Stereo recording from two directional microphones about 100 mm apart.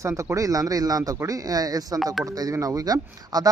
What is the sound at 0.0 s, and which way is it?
Speech, 30° right (ahead or behind).